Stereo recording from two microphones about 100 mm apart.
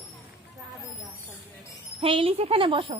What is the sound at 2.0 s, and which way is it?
Speech, 65° right (ahead or behind).